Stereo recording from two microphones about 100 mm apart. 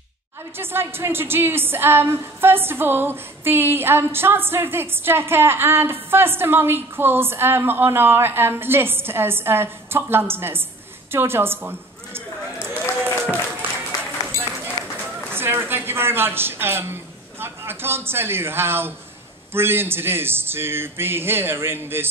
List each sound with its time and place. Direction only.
0.6 s speech: 25° right (ahead or behind)
13.0 s applause: 20° right (ahead or behind)
14.8 s a sound: 40° left (ahead or behind)
15.3 s a woman's voice: 25° right (ahead or behind)